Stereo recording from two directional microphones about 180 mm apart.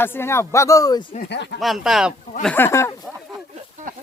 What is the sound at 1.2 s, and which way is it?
Speech, 70° left (ahead or behind).